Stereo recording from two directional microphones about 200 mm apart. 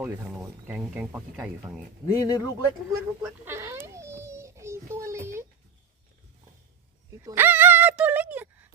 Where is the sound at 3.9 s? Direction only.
15° right (ahead or behind).